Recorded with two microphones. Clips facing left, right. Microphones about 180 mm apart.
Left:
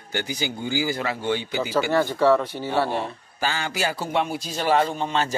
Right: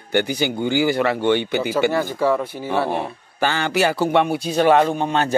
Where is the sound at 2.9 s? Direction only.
65° right (ahead or behind).